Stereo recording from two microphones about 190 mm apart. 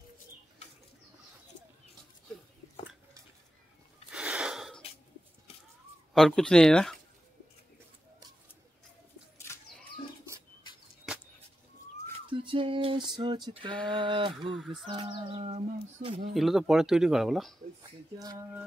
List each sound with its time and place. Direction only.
4.1 s a sound: 5° right (ahead or behind)
6.1 s speech: centre (ahead or behind)
12.3 s a sound: 25° right (ahead or behind)
13.2 s speech: 25° right (ahead or behind)
14.5 s speech: centre (ahead or behind)
14.9 s speech: 25° right (ahead or behind)
16.3 s speech: centre (ahead or behind)